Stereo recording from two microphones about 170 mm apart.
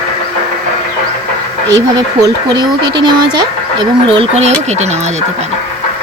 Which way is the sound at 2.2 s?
25° right (ahead or behind).